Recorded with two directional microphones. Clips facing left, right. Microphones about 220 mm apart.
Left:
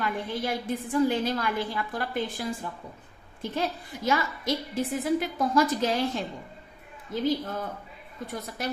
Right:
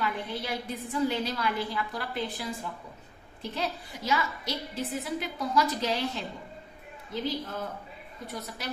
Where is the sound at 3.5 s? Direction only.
50° left (ahead or behind).